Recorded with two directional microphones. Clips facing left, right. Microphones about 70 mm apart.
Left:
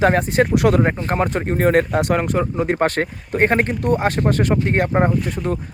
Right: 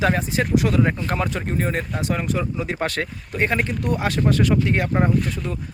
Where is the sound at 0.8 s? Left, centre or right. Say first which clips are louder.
Left 3 dB; left.